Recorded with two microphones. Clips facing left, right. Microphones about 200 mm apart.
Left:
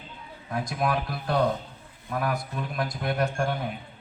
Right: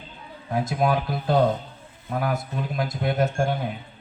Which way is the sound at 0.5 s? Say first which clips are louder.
Right 4 dB; 25° right (ahead or behind).